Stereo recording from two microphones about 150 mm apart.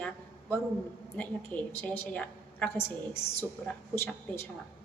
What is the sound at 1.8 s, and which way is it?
Speech, 10° left (ahead or behind).